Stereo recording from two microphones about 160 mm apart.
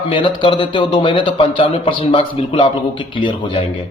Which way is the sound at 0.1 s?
30° left (ahead or behind).